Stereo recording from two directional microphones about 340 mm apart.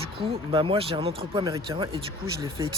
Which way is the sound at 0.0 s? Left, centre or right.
Centre.